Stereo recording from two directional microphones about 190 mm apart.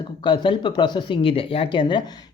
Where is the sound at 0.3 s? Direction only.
25° left (ahead or behind).